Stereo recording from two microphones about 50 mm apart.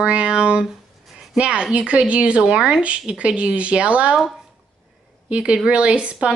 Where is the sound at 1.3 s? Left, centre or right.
Right.